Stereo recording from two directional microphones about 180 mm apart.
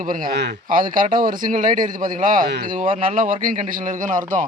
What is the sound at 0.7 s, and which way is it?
Speech, 50° right (ahead or behind).